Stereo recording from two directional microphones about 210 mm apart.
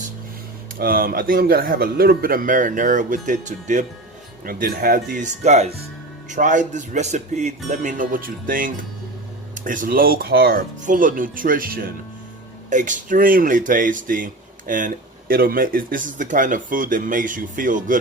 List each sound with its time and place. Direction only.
0.8 s speech: 45° right (ahead or behind)